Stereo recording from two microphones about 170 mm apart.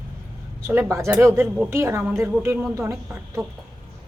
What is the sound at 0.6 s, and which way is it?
A woman's voice, 15° right (ahead or behind).